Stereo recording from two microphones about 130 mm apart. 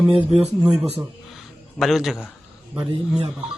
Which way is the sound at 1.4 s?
Centre (ahead or behind).